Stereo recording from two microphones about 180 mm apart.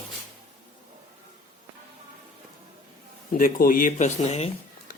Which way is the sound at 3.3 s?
50° left (ahead or behind).